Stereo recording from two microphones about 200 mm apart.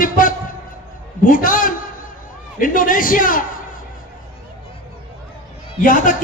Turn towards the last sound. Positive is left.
turn(degrees=45)  # may be behind; listen again after turning